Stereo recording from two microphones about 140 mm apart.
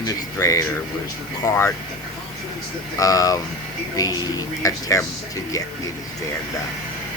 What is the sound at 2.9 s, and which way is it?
A man's voice, 25° left (ahead or behind).